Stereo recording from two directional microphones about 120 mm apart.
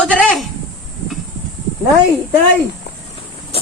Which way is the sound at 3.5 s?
55° left (ahead or behind).